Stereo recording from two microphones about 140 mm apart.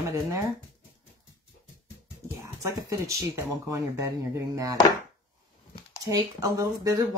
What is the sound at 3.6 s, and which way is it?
Speech, 20° right (ahead or behind).